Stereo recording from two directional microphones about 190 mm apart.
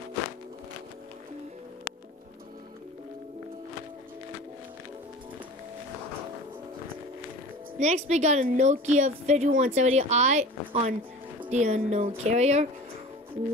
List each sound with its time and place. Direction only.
7.8 s a woman's voice: 35° right (ahead or behind)